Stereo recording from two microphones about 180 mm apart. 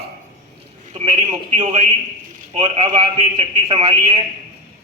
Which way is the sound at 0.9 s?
35° right (ahead or behind).